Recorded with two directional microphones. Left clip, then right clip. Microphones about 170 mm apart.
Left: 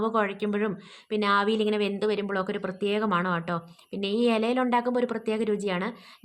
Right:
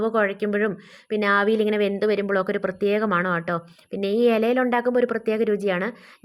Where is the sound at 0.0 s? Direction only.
15° right (ahead or behind).